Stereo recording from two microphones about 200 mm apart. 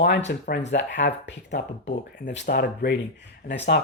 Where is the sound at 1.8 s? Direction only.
35° left (ahead or behind).